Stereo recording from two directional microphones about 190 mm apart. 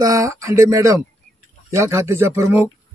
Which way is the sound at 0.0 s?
15° right (ahead or behind).